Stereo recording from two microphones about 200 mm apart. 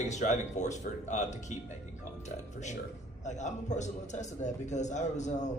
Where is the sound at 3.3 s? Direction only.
35° left (ahead or behind).